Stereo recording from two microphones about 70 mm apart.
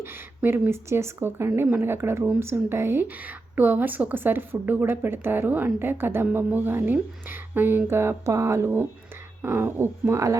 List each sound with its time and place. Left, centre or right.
0.0 s a woman's voice: right